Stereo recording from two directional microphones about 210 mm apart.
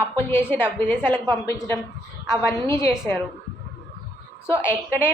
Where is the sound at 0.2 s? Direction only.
10° left (ahead or behind).